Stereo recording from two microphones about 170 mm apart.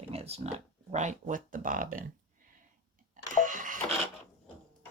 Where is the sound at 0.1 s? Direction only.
35° right (ahead or behind); by 2.0 s 55° right (ahead or behind).